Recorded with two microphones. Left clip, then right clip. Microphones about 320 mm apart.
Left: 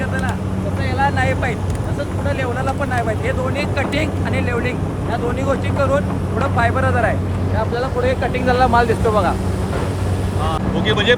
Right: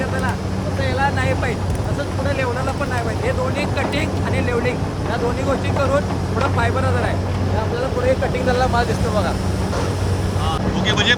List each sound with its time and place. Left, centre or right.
0.9 s vehicle: centre
3.2 s speech: centre
6.6 s speech: centre
8.4 s speech: left
10.8 s speech: centre